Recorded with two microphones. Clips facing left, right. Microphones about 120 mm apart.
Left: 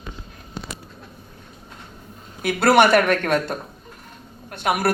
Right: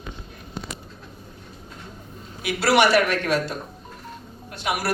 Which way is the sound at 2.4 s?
50° left (ahead or behind).